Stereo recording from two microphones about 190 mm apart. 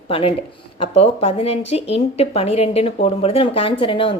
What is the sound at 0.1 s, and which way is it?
A woman's voice, 30° left (ahead or behind).